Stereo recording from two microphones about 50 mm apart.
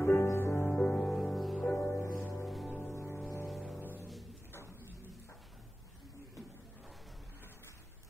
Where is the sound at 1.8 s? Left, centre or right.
Left.